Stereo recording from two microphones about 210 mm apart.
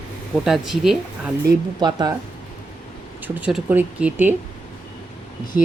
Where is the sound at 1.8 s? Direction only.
20° right (ahead or behind).